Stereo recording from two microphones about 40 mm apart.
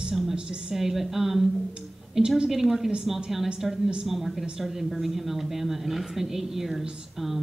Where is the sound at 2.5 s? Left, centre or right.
Centre.